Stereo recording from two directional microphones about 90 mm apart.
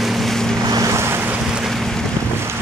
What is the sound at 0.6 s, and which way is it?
Boat, 40° right (ahead or behind).